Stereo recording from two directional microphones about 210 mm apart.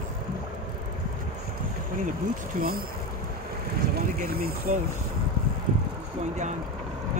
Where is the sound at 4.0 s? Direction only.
45° right (ahead or behind).